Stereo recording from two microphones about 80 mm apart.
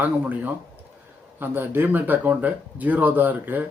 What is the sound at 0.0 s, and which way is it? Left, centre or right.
Speech, right.